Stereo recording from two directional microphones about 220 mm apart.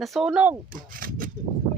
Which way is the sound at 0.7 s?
40° right (ahead or behind).